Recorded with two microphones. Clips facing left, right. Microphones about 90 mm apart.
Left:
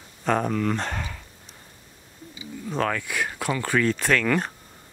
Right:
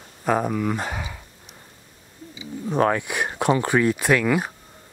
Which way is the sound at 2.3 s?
20° right (ahead or behind).